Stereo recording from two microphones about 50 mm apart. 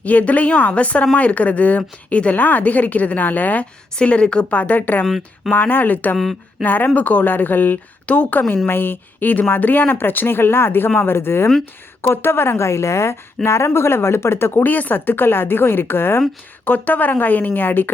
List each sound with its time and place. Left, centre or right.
0.0 s a woman's voice: left
3.9 s a woman's voice: left
4.5 s speech: left
5.0 s speech: centre
5.5 s a woman's voice: left
16.6 s speech: left